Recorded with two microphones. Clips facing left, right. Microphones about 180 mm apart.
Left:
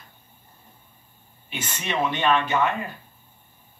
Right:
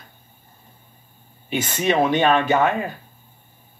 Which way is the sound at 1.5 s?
45° right (ahead or behind).